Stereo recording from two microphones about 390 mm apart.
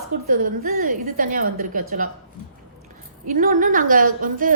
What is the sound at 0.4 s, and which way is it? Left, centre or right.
A woman's voice, right.